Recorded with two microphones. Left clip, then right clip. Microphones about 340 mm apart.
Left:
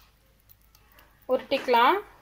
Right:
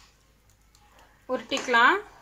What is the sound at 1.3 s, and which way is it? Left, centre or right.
Speech, centre.